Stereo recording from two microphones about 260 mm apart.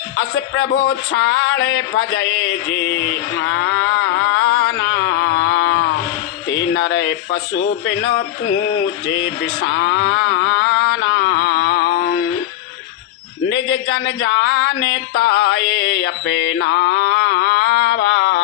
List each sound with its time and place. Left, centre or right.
0.2 s speech: left
9.2 s a sound: left
13.9 s speech: left
16.0 s mantra: left